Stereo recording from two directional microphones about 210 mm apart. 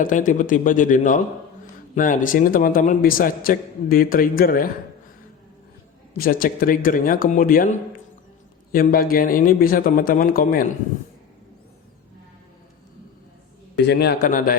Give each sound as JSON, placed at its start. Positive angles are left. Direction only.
{"t": 0.0, "sound": "a man's voice", "side_deg": 40}
{"t": 6.1, "sound": "a man's voice", "side_deg": 45}
{"t": 13.7, "sound": "speech", "side_deg": 55}